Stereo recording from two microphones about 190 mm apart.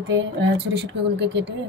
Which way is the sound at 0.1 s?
70° right (ahead or behind).